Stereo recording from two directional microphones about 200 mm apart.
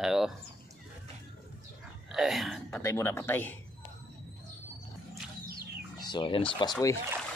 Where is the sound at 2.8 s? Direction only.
15° left (ahead or behind).